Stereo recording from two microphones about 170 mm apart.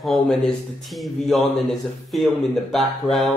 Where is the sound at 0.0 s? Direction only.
Centre (ahead or behind).